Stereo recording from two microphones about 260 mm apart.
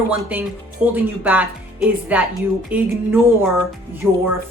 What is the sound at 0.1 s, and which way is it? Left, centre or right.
A woman's voice, centre.